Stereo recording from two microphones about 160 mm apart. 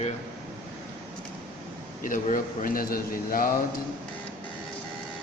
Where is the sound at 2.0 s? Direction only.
55° left (ahead or behind).